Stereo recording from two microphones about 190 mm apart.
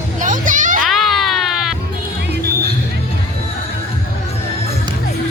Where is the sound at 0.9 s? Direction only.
Centre (ahead or behind).